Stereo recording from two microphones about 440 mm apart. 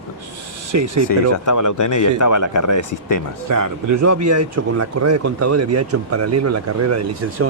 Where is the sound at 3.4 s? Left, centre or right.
Right.